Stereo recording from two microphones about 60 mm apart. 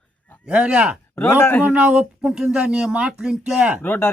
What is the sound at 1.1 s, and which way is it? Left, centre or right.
Speech, left.